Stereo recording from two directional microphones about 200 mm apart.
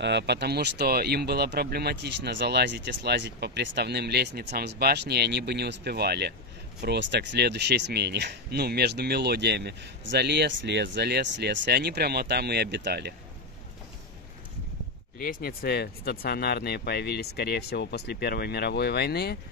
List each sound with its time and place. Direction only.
0.0 s speech: 60° right (ahead or behind)
15.1 s speech: 45° left (ahead or behind)